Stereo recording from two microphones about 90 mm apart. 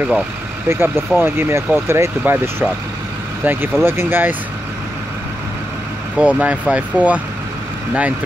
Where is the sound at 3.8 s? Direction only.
25° right (ahead or behind).